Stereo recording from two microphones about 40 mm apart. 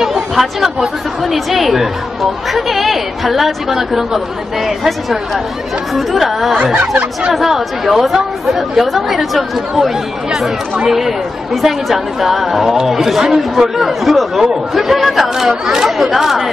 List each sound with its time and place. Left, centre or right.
0.0 s speech: centre
6.5 s speech: right
7.3 s speech: centre